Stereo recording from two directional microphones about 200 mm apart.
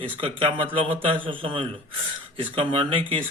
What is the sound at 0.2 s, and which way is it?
Speech, 25° right (ahead or behind).